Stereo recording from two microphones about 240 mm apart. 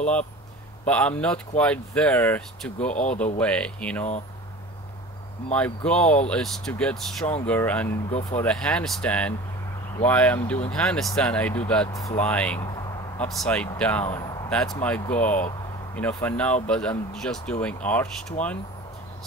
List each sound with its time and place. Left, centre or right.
0.8 s speech: centre
5.9 s speech: centre
18.4 s speech: left